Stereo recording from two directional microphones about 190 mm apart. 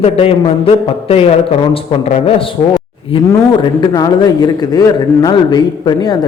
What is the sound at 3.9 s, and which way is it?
A man's voice, 20° left (ahead or behind).